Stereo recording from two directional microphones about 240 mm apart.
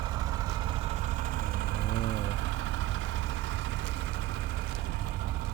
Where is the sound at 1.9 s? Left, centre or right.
Right.